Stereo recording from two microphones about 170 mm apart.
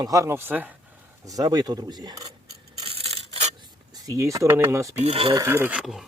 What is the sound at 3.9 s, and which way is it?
Speech, 20° right (ahead or behind).